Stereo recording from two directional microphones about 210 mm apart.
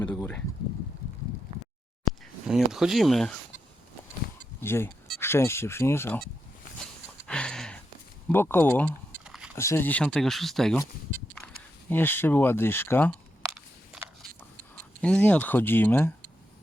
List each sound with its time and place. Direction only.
0.0 s speech: 10° left (ahead or behind)
1.0 s a sound: 45° left (ahead or behind)
2.5 s speech: centre (ahead or behind)
4.6 s speech: 10° left (ahead or behind)
7.3 s a sound: 5° left (ahead or behind)
8.3 s speech: 10° left (ahead or behind)
9.2 s a sound: 5° right (ahead or behind)
9.6 s speech: 10° left (ahead or behind)
11.9 s speech: 10° left (ahead or behind)
13.9 s biting: 5° right (ahead or behind)
15.0 s speech: 5° left (ahead or behind)